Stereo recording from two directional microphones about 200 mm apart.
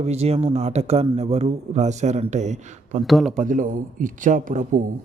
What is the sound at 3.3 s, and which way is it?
A man's voice, 40° right (ahead or behind).